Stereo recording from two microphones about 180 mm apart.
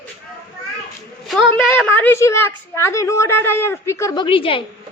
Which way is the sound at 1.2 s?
Centre (ahead or behind).